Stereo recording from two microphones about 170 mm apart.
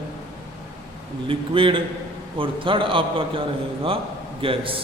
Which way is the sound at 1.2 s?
30° right (ahead or behind).